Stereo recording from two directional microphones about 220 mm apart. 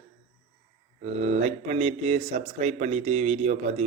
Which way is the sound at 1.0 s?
30° right (ahead or behind).